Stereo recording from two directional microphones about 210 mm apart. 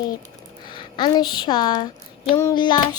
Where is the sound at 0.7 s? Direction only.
20° left (ahead or behind).